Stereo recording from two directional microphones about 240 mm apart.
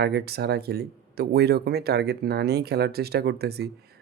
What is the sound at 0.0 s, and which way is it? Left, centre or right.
Speech, right.